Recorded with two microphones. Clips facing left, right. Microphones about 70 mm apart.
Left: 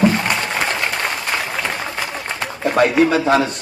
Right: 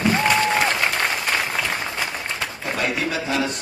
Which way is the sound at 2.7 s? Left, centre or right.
Left.